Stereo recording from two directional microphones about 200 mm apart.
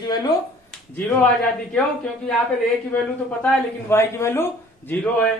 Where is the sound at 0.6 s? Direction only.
10° left (ahead or behind).